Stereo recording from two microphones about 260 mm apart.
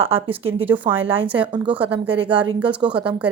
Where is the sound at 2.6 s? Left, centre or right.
Centre.